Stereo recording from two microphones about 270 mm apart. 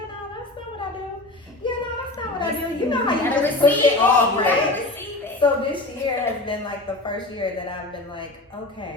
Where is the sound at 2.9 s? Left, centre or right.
Centre.